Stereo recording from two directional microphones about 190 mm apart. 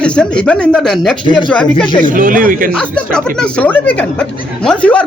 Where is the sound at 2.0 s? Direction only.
45° right (ahead or behind).